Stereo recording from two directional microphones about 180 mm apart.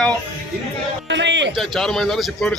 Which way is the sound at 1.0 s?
85° right.